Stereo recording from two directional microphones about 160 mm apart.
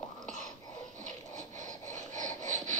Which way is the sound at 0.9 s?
50° right (ahead or behind).